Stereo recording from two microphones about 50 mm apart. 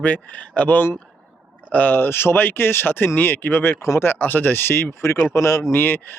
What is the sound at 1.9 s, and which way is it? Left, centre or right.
Speech, left.